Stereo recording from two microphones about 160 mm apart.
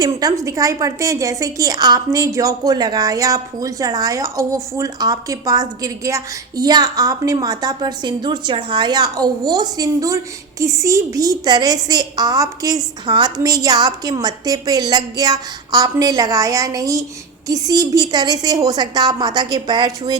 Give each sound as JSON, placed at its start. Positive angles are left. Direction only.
{"t": 0.0, "sound": "a woman's voice", "side_deg": -20}